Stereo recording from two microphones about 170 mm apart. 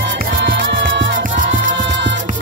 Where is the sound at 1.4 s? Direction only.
50° right (ahead or behind).